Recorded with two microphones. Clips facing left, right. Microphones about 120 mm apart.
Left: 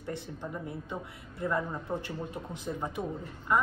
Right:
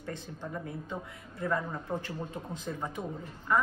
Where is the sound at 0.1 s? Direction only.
15° left (ahead or behind).